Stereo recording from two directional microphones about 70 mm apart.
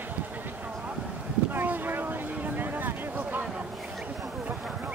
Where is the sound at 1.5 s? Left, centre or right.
Right.